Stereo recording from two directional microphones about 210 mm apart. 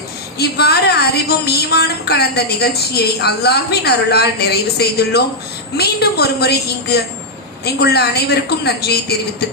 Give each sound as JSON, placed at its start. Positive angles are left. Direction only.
{"t": 0.3, "sound": "a woman's voice", "side_deg": 50}